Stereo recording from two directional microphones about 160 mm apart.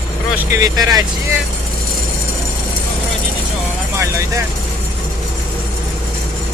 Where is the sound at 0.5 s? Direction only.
20° right (ahead or behind).